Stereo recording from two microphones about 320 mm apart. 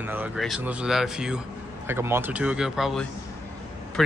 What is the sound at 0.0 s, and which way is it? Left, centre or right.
Speech, centre.